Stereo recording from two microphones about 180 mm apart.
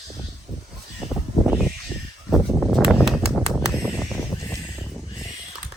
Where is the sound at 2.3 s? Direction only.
Centre (ahead or behind).